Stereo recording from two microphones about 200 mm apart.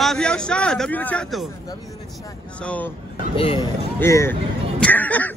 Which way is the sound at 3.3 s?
25° left (ahead or behind).